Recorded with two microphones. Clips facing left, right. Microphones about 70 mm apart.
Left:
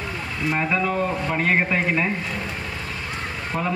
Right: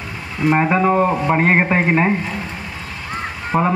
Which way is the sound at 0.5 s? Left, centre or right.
Right.